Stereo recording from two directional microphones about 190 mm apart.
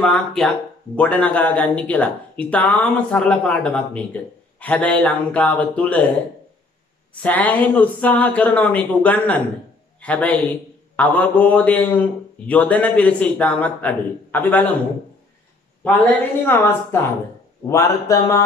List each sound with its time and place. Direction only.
0.0 s speech: 5° left (ahead or behind)
7.2 s speech: 10° left (ahead or behind)
15.8 s speech: 10° left (ahead or behind)